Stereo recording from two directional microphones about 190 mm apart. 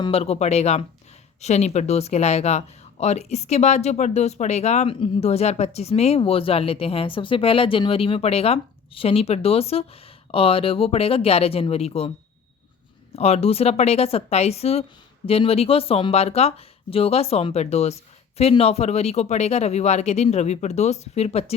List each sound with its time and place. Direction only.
0.0 s speech: 30° left (ahead or behind)
13.1 s speech: 35° left (ahead or behind)